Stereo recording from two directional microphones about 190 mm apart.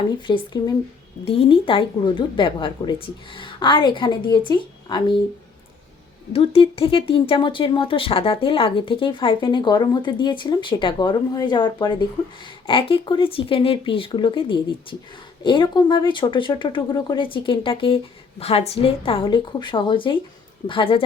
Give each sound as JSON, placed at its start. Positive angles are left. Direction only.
{"t": 0.3, "sound": "speech", "side_deg": 25}
{"t": 6.3, "sound": "speech", "side_deg": 30}